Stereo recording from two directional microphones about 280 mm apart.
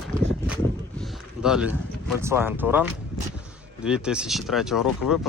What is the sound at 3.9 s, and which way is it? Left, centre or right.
Speech, centre.